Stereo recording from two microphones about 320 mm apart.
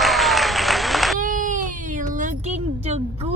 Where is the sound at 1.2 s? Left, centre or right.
Right.